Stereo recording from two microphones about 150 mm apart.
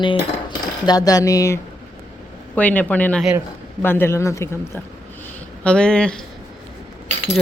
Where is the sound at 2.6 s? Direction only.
10° left (ahead or behind).